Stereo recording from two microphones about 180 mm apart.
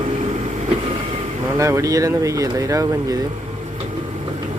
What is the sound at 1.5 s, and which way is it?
Speech, 15° right (ahead or behind).